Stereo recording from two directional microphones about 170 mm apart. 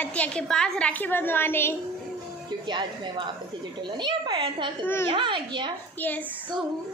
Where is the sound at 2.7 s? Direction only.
25° right (ahead or behind).